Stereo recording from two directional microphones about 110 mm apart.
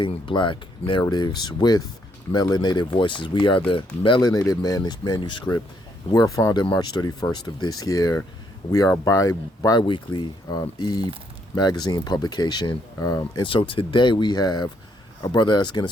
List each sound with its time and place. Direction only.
0.0 s speech: 50° left (ahead or behind)
4.3 s speech: 30° left (ahead or behind)
6.1 s speech: 30° left (ahead or behind)
9.8 s speech: 45° left (ahead or behind)
13.5 s speech: 55° left (ahead or behind)